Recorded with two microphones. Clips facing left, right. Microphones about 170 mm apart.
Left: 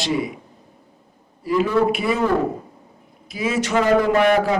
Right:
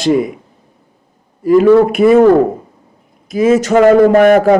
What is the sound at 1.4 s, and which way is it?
A man's voice, 50° right (ahead or behind).